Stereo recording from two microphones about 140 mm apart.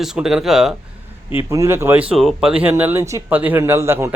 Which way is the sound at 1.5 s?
20° right (ahead or behind).